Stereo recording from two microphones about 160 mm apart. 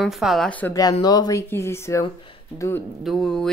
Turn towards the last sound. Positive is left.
turn(degrees=5)  # may be behind; listen again after turning